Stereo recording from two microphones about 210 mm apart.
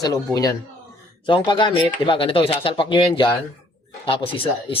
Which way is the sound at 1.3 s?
20° left (ahead or behind).